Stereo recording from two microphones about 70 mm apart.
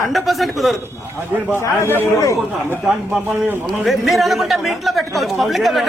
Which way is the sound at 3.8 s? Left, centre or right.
Centre.